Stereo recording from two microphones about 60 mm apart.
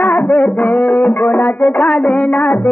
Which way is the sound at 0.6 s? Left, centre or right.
Left.